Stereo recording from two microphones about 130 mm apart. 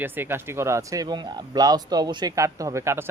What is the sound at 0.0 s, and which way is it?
Speech, 15° right (ahead or behind).